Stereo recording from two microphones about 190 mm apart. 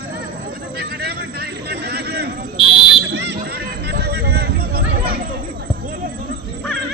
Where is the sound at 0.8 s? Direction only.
55° right (ahead or behind).